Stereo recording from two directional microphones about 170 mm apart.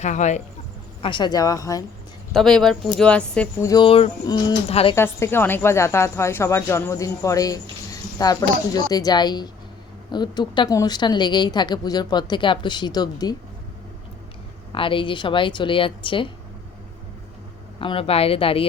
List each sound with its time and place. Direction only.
0.0 s speech: 45° left (ahead or behind)
1.0 s a woman's voice: 25° left (ahead or behind)
2.3 s speech: centre (ahead or behind)
3.7 s a woman's voice: 30° left (ahead or behind)
4.7 s speech: 35° left (ahead or behind)
4.9 s a woman's voice: 15° left (ahead or behind)
14.7 s a woman's voice: 30° left (ahead or behind)
17.7 s speech: 30° left (ahead or behind)